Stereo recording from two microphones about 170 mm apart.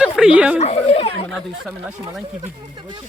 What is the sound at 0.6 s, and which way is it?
Chatter, 40° left (ahead or behind).